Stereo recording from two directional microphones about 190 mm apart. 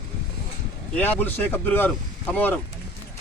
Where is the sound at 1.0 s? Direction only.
10° left (ahead or behind).